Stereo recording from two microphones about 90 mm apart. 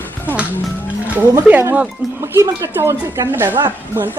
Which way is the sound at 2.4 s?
35° right (ahead or behind).